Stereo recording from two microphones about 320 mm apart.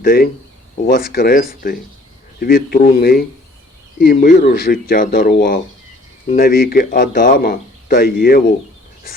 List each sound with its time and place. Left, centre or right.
0.0 s speech: left